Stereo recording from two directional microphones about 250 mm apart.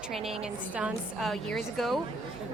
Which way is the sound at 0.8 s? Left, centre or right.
Centre.